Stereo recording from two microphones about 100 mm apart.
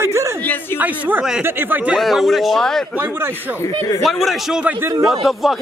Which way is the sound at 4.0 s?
Centre (ahead or behind).